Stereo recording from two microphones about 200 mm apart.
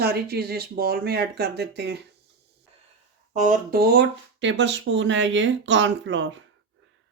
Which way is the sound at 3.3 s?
40° right (ahead or behind).